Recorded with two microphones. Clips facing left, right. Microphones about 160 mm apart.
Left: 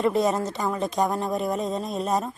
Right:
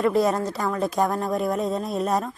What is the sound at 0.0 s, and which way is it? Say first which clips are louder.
Speech: right 1 dB; centre (ahead or behind).